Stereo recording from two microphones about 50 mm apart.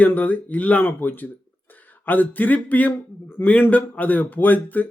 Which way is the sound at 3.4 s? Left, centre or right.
Left.